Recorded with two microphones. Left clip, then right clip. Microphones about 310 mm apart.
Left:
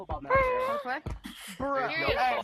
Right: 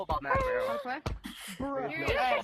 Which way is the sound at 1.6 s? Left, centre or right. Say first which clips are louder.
Left 5 dB; left.